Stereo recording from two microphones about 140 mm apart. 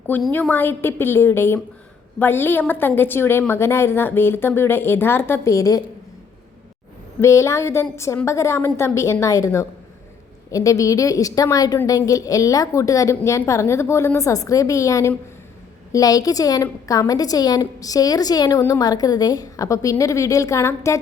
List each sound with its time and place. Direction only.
0.3 s a woman's voice: 15° left (ahead or behind)
7.2 s a woman's voice: 20° left (ahead or behind)